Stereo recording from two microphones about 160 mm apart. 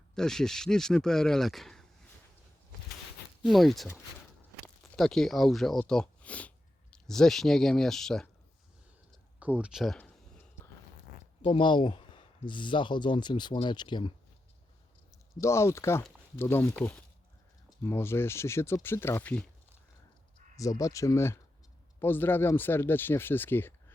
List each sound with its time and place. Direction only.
0.2 s speech: 5° left (ahead or behind)
3.4 s speech: centre (ahead or behind)
9.4 s a sound: 10° right (ahead or behind)
11.4 s speech: 30° left (ahead or behind)
15.4 s speech: 15° left (ahead or behind)
17.8 s speech: 15° left (ahead or behind)
20.6 s speech: 20° left (ahead or behind)